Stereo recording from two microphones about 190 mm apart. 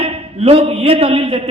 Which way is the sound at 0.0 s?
30° right (ahead or behind).